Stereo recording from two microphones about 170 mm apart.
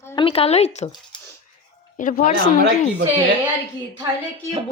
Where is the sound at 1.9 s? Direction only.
50° left (ahead or behind).